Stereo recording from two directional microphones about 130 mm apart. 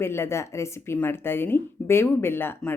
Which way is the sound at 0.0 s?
20° left (ahead or behind).